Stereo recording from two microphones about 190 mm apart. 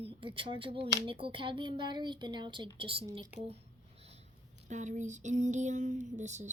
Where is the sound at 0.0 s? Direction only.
25° right (ahead or behind).